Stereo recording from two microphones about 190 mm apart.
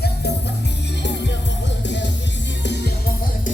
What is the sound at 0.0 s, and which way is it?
Music, 60° left (ahead or behind).